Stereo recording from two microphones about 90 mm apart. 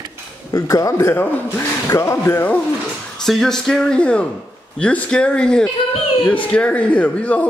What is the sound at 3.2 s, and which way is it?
A man's voice, 5° left (ahead or behind).